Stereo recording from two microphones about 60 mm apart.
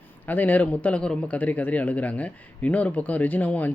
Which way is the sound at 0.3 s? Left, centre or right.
Left.